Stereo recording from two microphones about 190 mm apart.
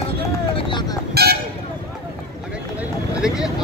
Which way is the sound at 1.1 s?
55° right (ahead or behind).